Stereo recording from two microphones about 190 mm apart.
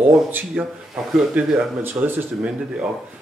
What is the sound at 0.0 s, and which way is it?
Speech, 10° right (ahead or behind).